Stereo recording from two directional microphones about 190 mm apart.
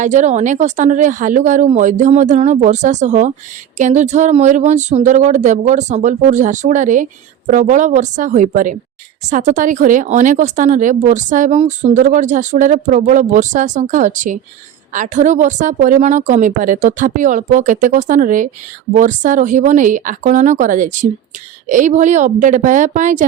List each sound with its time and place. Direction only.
0.0 s speech: 40° right (ahead or behind)